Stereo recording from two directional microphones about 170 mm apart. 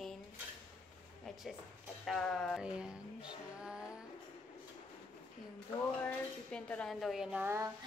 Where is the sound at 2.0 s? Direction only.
Centre (ahead or behind).